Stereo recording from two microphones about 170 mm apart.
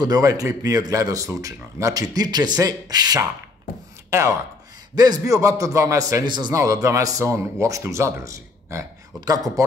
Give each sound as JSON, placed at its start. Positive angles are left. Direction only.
{"t": 0.0, "sound": "a man's voice", "side_deg": -20}